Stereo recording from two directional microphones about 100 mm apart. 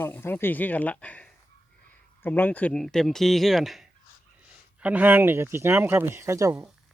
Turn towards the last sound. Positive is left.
turn(degrees=-35)  # may be behind; listen again after turning